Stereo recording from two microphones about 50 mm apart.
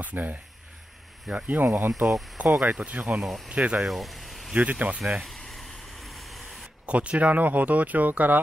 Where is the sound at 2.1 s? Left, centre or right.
Centre.